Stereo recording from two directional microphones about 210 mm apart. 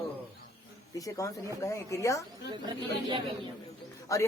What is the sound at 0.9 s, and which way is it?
Speech, 15° left (ahead or behind).